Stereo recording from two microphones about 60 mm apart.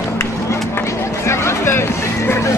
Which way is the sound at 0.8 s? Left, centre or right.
Left.